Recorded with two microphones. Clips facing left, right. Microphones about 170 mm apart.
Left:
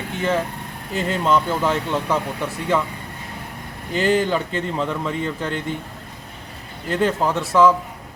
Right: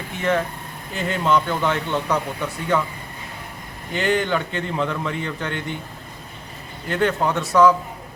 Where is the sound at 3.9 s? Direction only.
35° left (ahead or behind).